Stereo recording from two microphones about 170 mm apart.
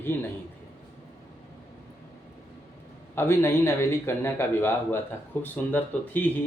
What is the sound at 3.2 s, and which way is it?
A man's voice, 15° left (ahead or behind).